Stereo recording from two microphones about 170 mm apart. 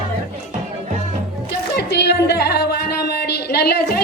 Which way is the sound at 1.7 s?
75° left (ahead or behind).